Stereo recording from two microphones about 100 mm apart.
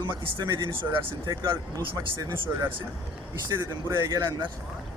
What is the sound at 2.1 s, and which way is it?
A man's voice, 25° right (ahead or behind).